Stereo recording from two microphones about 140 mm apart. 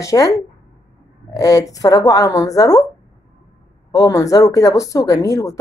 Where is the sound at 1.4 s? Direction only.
25° left (ahead or behind).